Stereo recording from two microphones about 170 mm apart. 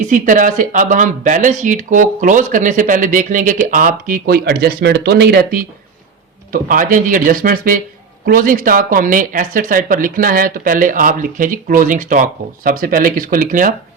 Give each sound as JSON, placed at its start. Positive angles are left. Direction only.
{"t": 0.0, "sound": "speech", "side_deg": -50}